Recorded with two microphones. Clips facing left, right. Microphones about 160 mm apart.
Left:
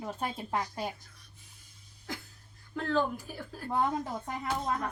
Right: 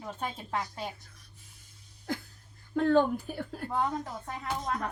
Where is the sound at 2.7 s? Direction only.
55° right (ahead or behind).